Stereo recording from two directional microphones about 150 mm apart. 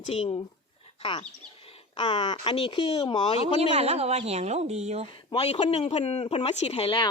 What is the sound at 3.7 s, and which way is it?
A woman's voice, 45° right (ahead or behind).